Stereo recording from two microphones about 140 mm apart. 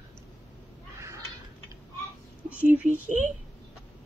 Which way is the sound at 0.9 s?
20° right (ahead or behind).